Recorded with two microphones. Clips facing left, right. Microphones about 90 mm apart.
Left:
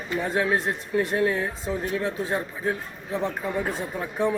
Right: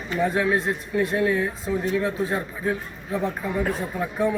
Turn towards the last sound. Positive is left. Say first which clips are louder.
# right 2 dB
turn(degrees=25)  # may be behind; listen again after turning